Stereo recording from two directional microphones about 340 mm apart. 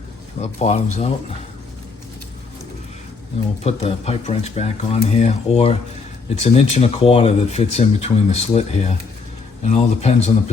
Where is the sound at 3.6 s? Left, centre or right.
Centre.